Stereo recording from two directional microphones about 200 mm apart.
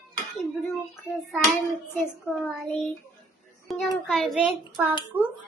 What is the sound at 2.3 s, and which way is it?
Child singing, 5° right (ahead or behind).